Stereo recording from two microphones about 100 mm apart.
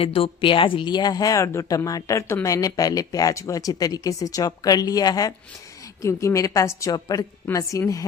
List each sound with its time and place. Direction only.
0.0 s a woman's voice: 70° left (ahead or behind); by 8.0 s 35° left (ahead or behind)